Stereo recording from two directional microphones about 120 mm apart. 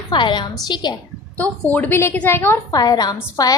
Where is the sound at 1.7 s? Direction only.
15° left (ahead or behind).